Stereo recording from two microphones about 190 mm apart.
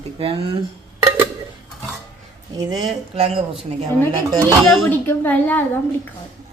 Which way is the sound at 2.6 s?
20° right (ahead or behind).